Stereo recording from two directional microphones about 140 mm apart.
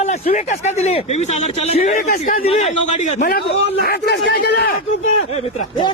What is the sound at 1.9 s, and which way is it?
Speech, 90° left.